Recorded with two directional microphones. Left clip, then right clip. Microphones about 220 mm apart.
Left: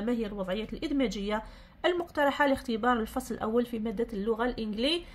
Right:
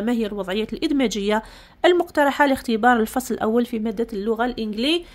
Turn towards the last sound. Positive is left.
turn(degrees=-40)  # may be behind; listen again after turning